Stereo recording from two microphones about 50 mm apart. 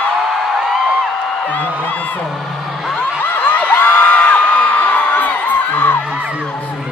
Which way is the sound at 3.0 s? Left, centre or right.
Left.